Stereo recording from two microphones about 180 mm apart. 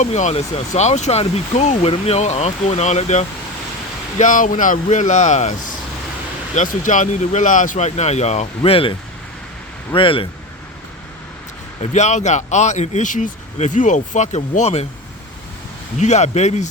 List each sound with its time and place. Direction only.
0.0 s speech: 40° left (ahead or behind)
11.8 s speech: 40° left (ahead or behind)
16.0 s speech: 40° left (ahead or behind)